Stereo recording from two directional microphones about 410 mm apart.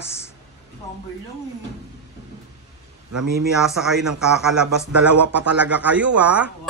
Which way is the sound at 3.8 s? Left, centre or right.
Centre.